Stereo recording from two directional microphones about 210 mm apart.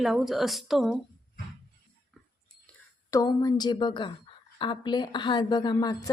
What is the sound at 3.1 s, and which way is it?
A woman's voice, 15° left (ahead or behind).